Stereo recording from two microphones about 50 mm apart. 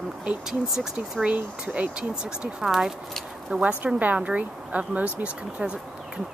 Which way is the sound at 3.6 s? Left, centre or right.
Right.